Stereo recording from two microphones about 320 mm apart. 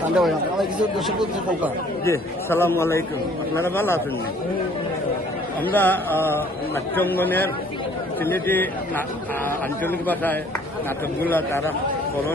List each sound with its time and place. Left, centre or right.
0.2 s a man's voice: centre
5.6 s speech: centre
9.8 s a man's voice: centre